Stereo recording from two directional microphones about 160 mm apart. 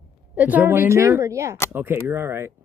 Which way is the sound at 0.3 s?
10° right (ahead or behind).